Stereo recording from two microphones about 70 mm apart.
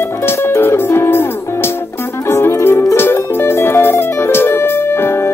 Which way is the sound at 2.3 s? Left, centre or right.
Left.